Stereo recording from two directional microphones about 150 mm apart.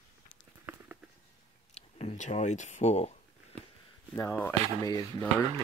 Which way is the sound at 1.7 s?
45° left (ahead or behind).